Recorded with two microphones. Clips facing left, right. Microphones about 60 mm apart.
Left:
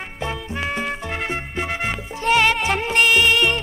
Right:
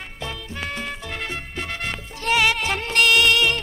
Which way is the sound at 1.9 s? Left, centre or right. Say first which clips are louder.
Left 3 dB; centre.